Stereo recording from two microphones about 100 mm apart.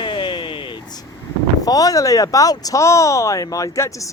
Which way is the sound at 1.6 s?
40° left (ahead or behind).